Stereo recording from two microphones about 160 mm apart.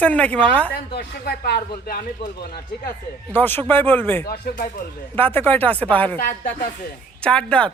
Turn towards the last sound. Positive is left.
turn(degrees=5)  # may be behind; listen again after turning